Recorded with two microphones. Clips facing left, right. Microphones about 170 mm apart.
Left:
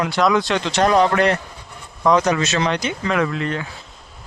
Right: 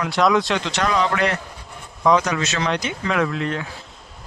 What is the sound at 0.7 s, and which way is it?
Speech, 45° left (ahead or behind).